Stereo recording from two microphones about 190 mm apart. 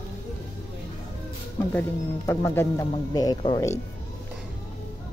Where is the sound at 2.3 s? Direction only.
15° left (ahead or behind).